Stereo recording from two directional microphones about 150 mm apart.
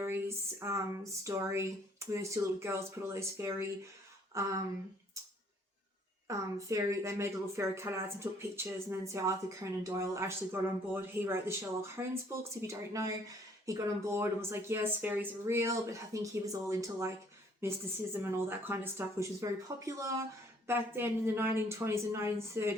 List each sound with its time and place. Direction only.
0.0 s a woman's voice: 15° right (ahead or behind)
6.2 s a woman's voice: 20° right (ahead or behind)